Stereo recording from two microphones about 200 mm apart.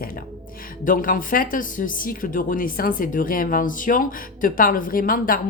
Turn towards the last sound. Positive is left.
turn(degrees=45)  # may be behind; listen again after turning